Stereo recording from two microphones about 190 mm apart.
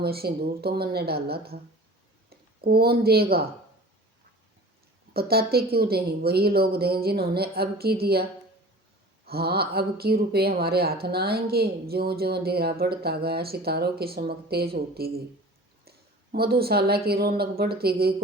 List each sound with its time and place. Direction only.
0.0 s a woman's voice: 55° right (ahead or behind)
5.1 s a woman's voice: 55° right (ahead or behind)